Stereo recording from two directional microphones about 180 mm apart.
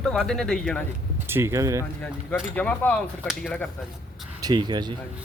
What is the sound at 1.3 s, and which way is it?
Speech, 15° right (ahead or behind).